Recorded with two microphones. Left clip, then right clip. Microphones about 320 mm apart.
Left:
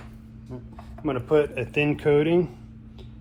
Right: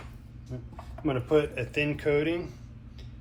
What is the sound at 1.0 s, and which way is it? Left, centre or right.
Speech, centre.